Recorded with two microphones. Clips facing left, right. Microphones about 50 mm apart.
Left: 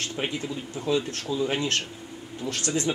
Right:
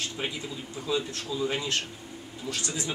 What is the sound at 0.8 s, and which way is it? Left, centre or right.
Speech, left.